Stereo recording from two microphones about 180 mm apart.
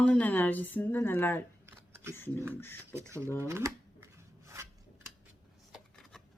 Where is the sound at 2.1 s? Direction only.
10° left (ahead or behind).